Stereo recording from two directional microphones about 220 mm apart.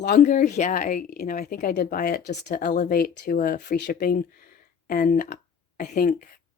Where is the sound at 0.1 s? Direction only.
35° left (ahead or behind).